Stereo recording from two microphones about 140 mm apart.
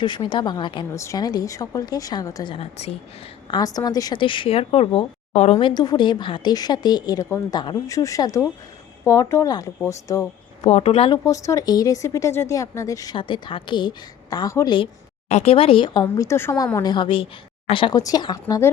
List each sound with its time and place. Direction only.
0.0 s speech: 35° left (ahead or behind)
0.9 s a woman's voice: 25° left (ahead or behind); by 3.0 s 45° left (ahead or behind)
3.5 s speech: 25° left (ahead or behind); by 5.5 s 50° left (ahead or behind)
5.5 s a woman's voice: 35° left (ahead or behind)
7.5 s a woman's voice: 30° left (ahead or behind)
10.6 s speech: 45° left (ahead or behind)
11.3 s a woman's voice: 25° left (ahead or behind)
13.1 s speech: 35° left (ahead or behind)
15.3 s speech: 50° left (ahead or behind)
16.0 s a woman's voice: 20° left (ahead or behind)
16.7 s a woman's voice: 30° left (ahead or behind)